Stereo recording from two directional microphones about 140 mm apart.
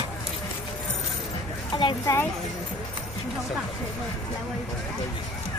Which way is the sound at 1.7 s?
35° left (ahead or behind).